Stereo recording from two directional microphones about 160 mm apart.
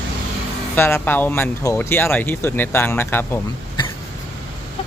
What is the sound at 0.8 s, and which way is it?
Speech, 15° left (ahead or behind).